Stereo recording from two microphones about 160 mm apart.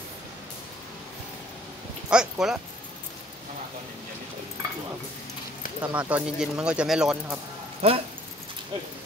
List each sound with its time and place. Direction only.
2.0 s speech: 5° right (ahead or behind)
5.8 s speech: 10° right (ahead or behind)
7.8 s speech: 35° right (ahead or behind)